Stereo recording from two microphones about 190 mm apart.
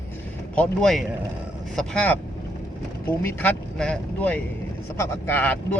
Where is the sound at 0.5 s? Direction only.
5° left (ahead or behind).